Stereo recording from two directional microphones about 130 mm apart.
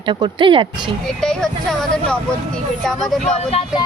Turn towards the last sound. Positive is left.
turn(degrees=5)  # may be behind; listen again after turning